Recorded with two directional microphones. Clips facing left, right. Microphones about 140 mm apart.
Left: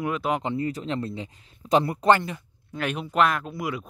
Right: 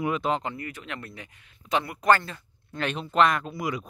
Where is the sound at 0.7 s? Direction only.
30° left (ahead or behind).